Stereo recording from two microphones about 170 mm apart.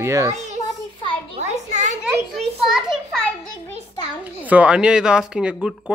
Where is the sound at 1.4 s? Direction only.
45° right (ahead or behind).